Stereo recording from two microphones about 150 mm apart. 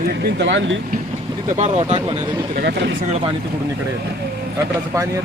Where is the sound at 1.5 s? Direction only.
50° right (ahead or behind).